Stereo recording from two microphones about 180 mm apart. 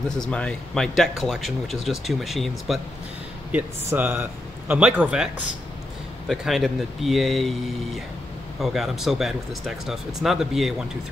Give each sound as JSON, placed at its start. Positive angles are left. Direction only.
{"t": 0.1, "sound": "speech", "side_deg": 5}
{"t": 3.5, "sound": "speech", "side_deg": -10}